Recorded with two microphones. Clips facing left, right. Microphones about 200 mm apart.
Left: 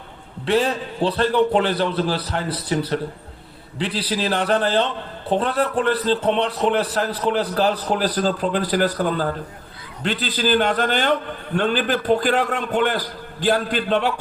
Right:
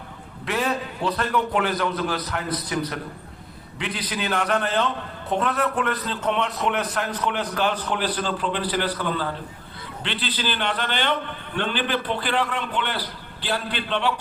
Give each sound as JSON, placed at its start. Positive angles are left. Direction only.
{"t": 0.4, "sound": "a man's voice", "side_deg": 30}